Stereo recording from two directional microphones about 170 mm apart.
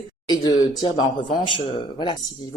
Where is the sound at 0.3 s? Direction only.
25° left (ahead or behind).